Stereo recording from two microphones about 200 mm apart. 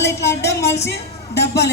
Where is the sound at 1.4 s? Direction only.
55° left (ahead or behind).